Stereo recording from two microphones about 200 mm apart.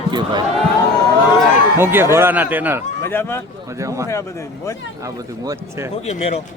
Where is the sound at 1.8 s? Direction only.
10° right (ahead or behind).